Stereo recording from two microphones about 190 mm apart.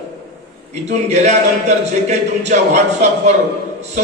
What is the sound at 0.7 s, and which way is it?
Speech, 35° right (ahead or behind).